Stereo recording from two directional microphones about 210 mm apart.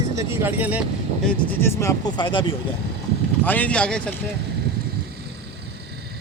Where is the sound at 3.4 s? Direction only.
10° left (ahead or behind).